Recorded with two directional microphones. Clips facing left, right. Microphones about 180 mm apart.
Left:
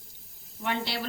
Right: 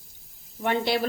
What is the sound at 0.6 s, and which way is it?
Speech, 50° right (ahead or behind).